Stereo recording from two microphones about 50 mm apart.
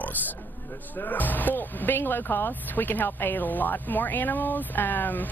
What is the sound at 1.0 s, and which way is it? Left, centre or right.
Speech, left.